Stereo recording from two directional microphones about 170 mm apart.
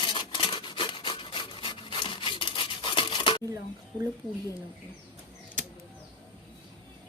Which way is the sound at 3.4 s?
20° right (ahead or behind).